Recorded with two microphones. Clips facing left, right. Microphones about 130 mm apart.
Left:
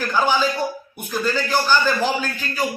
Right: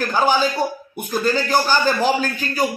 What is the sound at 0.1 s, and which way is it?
A man's voice, 40° right (ahead or behind).